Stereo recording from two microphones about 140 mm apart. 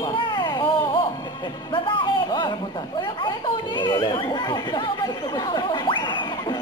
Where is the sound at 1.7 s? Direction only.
35° left (ahead or behind).